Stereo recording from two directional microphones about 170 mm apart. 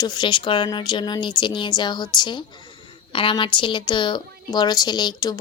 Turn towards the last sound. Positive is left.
turn(degrees=25)  # may be behind; listen again after turning